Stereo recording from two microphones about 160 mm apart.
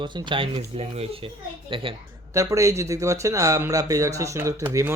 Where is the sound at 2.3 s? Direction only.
20° right (ahead or behind).